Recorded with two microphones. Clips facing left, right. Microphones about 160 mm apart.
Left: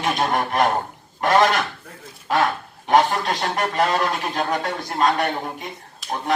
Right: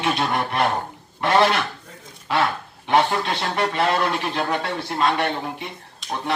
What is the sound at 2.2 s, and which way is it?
Speech, 45° left (ahead or behind).